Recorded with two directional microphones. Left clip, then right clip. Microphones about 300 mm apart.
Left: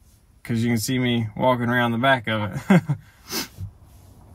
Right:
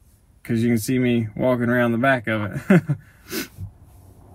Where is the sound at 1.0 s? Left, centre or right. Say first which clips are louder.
Right 2 dB; left.